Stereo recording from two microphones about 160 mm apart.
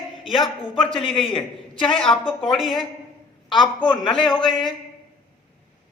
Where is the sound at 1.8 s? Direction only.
5° left (ahead or behind).